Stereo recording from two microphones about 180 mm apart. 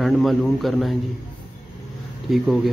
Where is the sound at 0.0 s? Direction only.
Centre (ahead or behind).